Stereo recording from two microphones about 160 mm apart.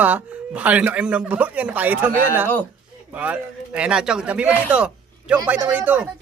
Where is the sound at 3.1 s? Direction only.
10° right (ahead or behind).